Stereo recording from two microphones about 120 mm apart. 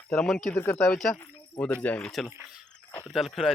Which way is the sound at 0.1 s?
5° left (ahead or behind).